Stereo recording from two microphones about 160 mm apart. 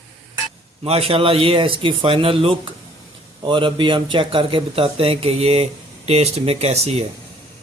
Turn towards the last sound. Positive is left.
turn(degrees=-40)  # may be behind; listen again after turning